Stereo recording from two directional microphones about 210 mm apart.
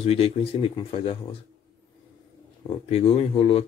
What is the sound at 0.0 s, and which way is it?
Speech, 25° left (ahead or behind).